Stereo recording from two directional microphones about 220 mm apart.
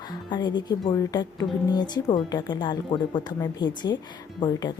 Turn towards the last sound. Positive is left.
turn(degrees=20)  # may be behind; listen again after turning